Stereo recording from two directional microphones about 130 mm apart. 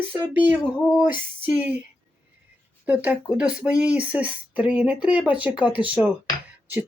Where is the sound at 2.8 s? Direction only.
10° right (ahead or behind).